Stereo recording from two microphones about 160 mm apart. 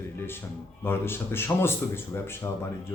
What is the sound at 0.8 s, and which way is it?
A man's voice, 15° left (ahead or behind).